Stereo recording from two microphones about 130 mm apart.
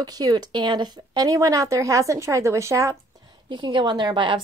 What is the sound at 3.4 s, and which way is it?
Speech, 35° right (ahead or behind).